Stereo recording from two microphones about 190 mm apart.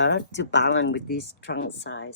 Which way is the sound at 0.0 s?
65° left (ahead or behind).